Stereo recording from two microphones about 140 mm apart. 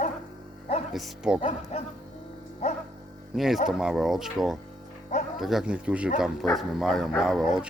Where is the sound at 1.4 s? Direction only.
45° left (ahead or behind).